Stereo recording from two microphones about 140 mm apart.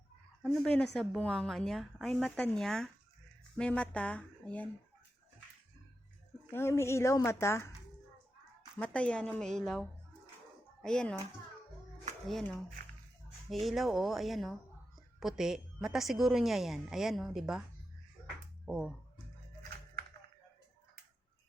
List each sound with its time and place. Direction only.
0.4 s a woman's voice: centre (ahead or behind)
6.5 s a woman's voice: 15° left (ahead or behind)
8.8 s speech: 10° left (ahead or behind)
10.8 s a woman's voice: 5° left (ahead or behind)
12.3 s a woman's voice: 5° left (ahead or behind)
18.6 s speech: 5° right (ahead or behind)